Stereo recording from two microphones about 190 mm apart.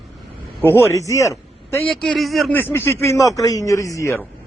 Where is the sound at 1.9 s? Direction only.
Centre (ahead or behind).